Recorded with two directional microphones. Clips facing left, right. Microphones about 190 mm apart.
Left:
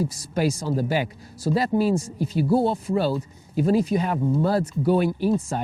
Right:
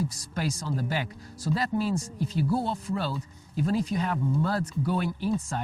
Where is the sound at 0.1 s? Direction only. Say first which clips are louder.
Left 8 dB; 5° left (ahead or behind).